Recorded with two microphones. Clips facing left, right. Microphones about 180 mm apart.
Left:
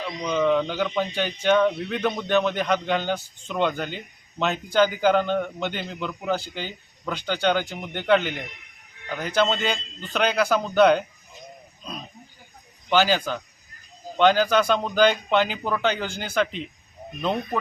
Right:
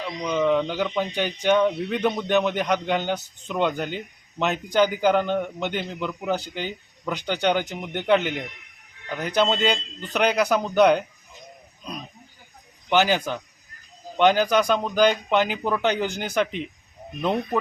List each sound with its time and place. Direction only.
0.0 s speech: 5° right (ahead or behind)
12.9 s speech: 20° right (ahead or behind)